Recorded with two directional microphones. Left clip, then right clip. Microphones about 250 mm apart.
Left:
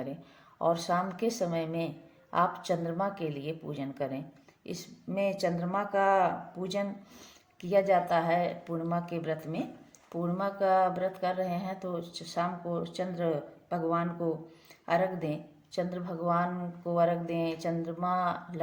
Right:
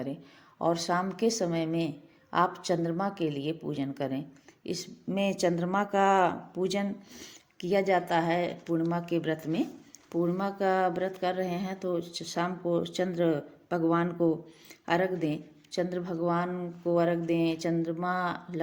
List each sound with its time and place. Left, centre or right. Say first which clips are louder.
0.6 s speech: even; right